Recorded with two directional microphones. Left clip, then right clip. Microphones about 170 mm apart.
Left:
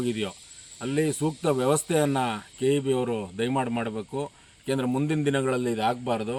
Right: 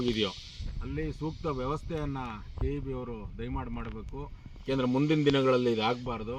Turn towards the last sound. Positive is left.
turn(degrees=30)  # may be behind; listen again after turning